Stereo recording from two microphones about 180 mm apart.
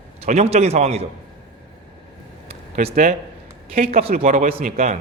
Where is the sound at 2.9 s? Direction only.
50° right (ahead or behind).